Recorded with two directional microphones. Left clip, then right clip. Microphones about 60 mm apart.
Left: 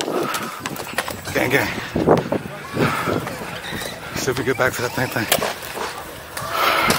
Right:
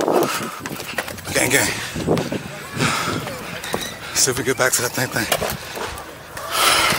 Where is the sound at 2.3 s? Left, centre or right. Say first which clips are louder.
Left 4 dB; left.